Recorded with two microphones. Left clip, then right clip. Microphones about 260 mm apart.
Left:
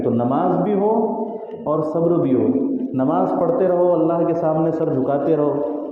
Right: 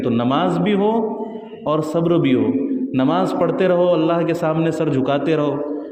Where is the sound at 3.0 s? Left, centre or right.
Right.